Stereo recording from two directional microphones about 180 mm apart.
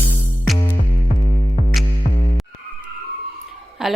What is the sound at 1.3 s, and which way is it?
Music, 45° left (ahead or behind).